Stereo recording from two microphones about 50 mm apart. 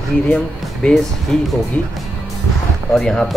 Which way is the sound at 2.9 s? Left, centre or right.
Centre.